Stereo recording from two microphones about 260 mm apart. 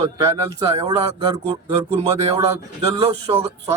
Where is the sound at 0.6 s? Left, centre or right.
Right.